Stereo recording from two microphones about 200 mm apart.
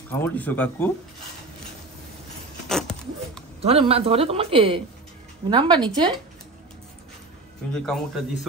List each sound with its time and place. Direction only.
0.1 s speech: 10° left (ahead or behind)
2.7 s a sound: centre (ahead or behind)
3.6 s a woman's voice: 30° right (ahead or behind)
7.7 s a man's voice: centre (ahead or behind)